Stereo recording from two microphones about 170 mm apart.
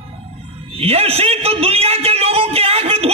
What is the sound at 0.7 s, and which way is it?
A man's voice, 35° right (ahead or behind).